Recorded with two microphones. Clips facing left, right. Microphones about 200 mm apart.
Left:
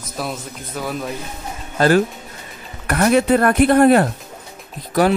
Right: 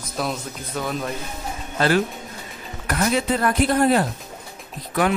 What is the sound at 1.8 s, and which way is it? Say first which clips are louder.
Speech: left 5 dB; 45° left (ahead or behind).